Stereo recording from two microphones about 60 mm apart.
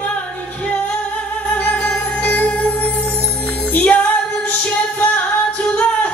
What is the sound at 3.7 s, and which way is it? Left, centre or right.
Music, left.